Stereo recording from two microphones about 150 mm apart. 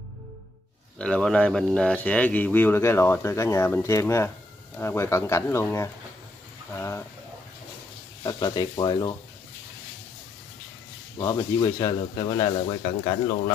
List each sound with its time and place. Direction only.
0.9 s speech: 5° left (ahead or behind)
8.2 s speech: 25° left (ahead or behind)
11.1 s speech: 25° left (ahead or behind)